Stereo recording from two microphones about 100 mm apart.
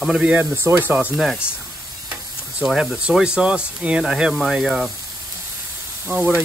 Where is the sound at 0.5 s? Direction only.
25° right (ahead or behind).